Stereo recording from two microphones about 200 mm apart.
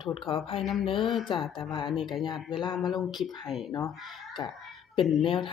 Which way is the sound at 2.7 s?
Centre (ahead or behind).